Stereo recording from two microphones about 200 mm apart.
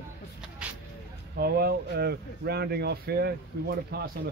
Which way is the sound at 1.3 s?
50° right (ahead or behind).